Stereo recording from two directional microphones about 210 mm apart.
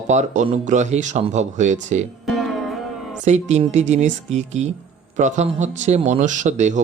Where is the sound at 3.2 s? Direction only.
35° right (ahead or behind).